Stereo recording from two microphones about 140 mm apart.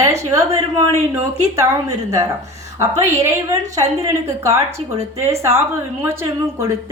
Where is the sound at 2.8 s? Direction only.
20° right (ahead or behind).